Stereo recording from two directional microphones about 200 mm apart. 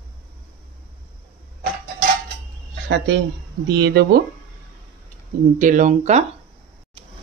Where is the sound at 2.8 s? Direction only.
60° right (ahead or behind).